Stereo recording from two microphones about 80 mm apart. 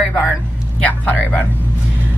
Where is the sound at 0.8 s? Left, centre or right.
Centre.